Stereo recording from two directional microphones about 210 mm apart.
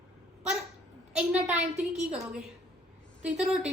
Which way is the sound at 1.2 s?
5° right (ahead or behind).